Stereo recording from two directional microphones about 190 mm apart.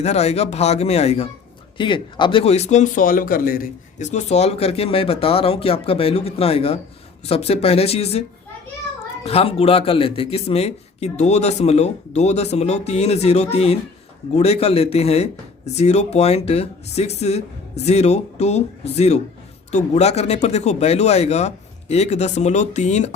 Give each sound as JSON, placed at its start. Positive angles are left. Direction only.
{"t": 0.0, "sound": "speech", "side_deg": 35}
{"t": 9.2, "sound": "speech", "side_deg": 30}